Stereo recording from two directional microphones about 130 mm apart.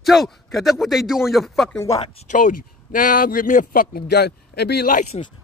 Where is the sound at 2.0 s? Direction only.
80° left.